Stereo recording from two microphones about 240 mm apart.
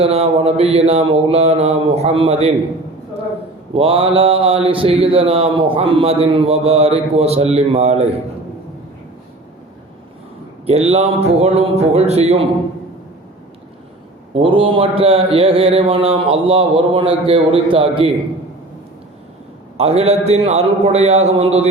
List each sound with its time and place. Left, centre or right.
0.0 s mantra: right
3.8 s mantra: right
10.7 s mantra: right
14.3 s mantra: right
19.7 s mantra: right